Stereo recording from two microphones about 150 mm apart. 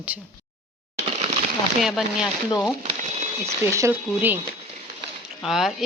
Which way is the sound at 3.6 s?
20° right (ahead or behind).